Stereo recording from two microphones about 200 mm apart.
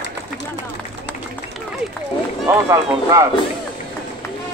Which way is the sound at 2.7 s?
15° right (ahead or behind).